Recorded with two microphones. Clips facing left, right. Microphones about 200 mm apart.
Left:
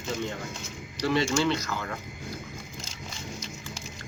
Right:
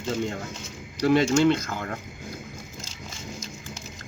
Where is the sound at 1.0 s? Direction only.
50° right (ahead or behind).